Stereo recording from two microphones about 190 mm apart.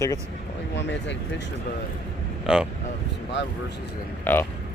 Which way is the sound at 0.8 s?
70° left (ahead or behind).